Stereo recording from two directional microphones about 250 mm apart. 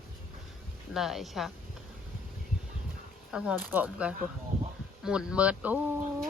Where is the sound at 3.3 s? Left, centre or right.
Centre.